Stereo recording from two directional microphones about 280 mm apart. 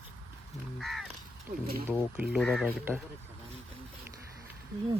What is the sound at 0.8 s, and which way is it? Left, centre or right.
Speech, centre.